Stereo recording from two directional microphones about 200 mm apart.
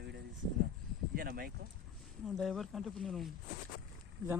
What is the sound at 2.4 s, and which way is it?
Speech, centre (ahead or behind).